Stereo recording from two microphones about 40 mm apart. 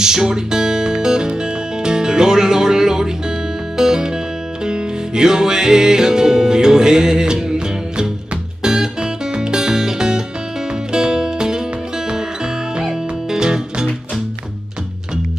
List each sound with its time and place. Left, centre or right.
0.0 s music: centre
8.6 s music: centre
12.7 s music: centre